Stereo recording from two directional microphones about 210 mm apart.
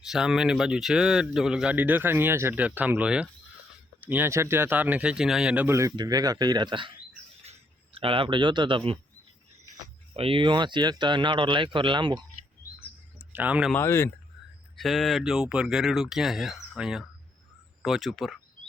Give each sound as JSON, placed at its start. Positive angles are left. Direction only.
{"t": 0.0, "sound": "a man's voice", "side_deg": -5}
{"t": 7.9, "sound": "speech", "side_deg": -25}
{"t": 10.2, "sound": "speech", "side_deg": -25}
{"t": 13.1, "sound": "a sound", "side_deg": -5}
{"t": 13.7, "sound": "speech", "side_deg": 10}
{"t": 14.8, "sound": "speech", "side_deg": 0}